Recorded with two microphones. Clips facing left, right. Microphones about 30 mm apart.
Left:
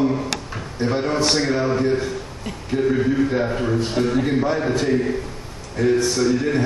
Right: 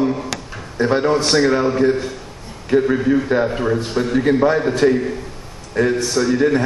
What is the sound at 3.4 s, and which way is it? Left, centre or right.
Speech, centre.